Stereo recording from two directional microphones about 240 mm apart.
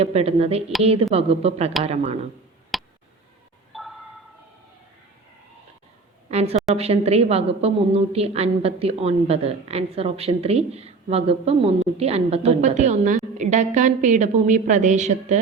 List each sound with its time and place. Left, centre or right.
0.0 s a woman's voice: right
2.7 s tick: centre
3.7 s a sound: centre
6.2 s a woman's voice: right